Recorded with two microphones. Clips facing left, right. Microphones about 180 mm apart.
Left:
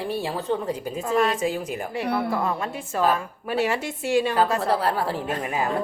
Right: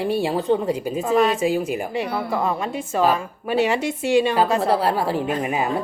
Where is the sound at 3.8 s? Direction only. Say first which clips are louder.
Right 4 dB; 75° right (ahead or behind).